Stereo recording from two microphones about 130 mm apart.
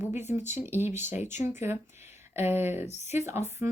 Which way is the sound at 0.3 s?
20° right (ahead or behind).